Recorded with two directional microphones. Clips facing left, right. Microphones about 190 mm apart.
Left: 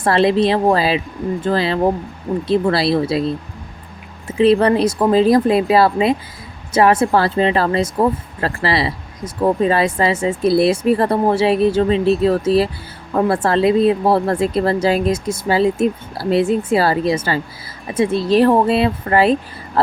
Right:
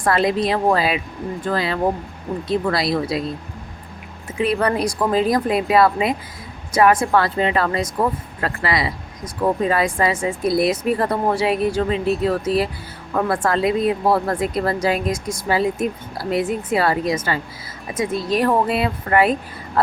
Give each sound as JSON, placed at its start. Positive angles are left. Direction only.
{"t": 0.0, "sound": "speech", "side_deg": 30}
{"t": 4.4, "sound": "speech", "side_deg": 25}